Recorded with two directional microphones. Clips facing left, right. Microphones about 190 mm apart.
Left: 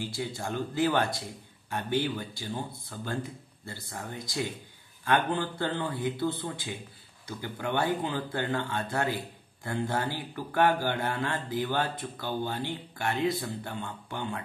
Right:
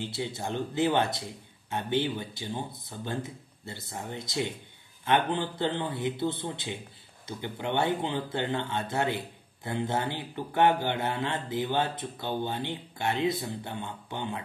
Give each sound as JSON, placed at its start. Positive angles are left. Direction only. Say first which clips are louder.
{"t": 0.0, "sound": "speech", "louder": "right 1 dB", "side_deg": -20}